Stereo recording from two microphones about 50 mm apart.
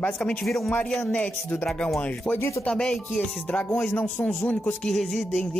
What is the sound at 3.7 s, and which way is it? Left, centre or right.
Speech, left.